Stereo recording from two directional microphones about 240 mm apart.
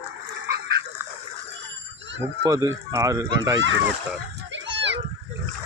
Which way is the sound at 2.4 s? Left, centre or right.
Centre.